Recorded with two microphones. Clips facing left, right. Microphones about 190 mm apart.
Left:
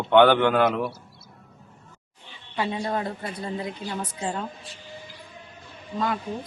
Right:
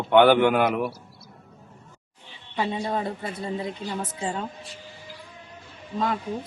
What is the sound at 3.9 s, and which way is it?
Speech, 5° right (ahead or behind).